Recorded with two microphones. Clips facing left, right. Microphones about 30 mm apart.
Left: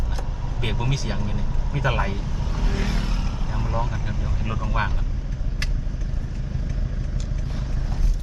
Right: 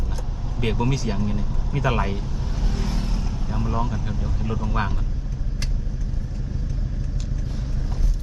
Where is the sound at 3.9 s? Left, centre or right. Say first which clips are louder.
Right 1 dB; left.